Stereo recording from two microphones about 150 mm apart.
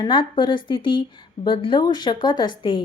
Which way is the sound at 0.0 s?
30° left (ahead or behind).